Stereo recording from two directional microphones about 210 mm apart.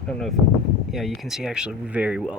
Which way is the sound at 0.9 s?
Centre (ahead or behind).